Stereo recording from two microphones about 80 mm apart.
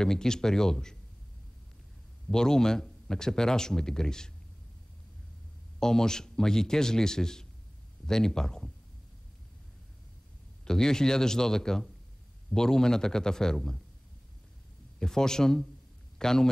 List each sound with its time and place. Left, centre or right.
0.0 s speech: centre
2.3 s speech: centre
5.8 s speech: centre
10.6 s speech: centre
15.0 s speech: centre